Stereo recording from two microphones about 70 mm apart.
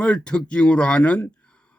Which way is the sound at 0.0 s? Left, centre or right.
Centre.